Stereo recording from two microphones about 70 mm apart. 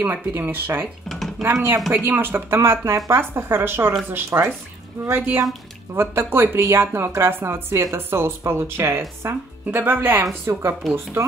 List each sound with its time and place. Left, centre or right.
0.0 s speech: right
5.1 s speech: right